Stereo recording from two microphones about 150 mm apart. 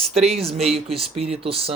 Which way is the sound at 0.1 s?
45° right (ahead or behind).